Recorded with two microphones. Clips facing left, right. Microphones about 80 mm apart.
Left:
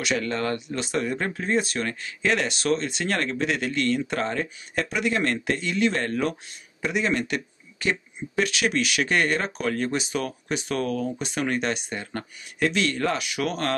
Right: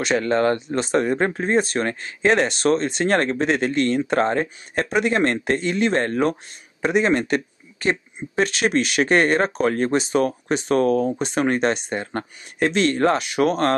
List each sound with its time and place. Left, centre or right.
0.0 s speech: right